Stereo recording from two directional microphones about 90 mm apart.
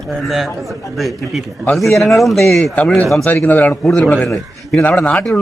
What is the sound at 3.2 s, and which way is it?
Speech, 20° left (ahead or behind).